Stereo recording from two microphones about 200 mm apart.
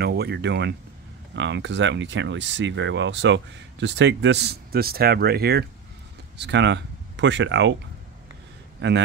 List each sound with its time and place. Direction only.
0.0 s speech: 55° right (ahead or behind)
8.8 s speech: 60° right (ahead or behind)